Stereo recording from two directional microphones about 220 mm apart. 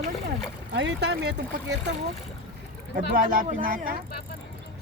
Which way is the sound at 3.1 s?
40° right (ahead or behind).